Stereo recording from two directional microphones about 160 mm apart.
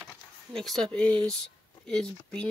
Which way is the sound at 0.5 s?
Centre (ahead or behind).